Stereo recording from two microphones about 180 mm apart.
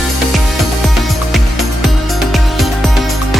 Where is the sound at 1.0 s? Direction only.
Centre (ahead or behind).